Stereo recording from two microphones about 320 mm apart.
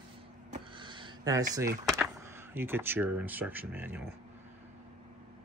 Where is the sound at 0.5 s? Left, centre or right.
Centre.